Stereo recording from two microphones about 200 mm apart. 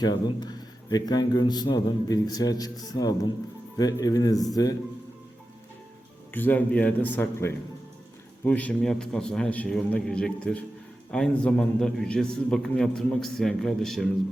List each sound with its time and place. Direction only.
0.0 s a man's voice: 20° left (ahead or behind)
6.3 s a man's voice: 10° left (ahead or behind)